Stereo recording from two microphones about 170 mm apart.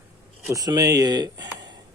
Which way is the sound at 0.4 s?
20° right (ahead or behind).